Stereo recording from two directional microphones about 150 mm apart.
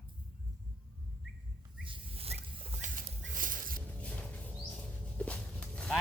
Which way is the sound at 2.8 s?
60° right (ahead or behind).